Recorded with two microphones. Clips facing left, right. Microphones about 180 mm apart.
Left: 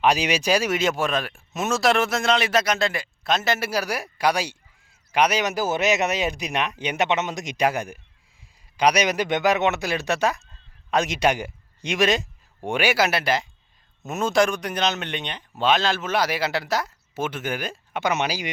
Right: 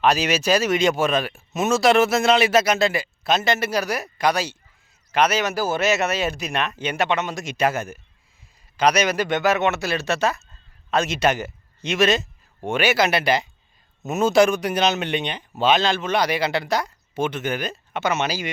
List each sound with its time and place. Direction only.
0.0 s speech: 15° left (ahead or behind)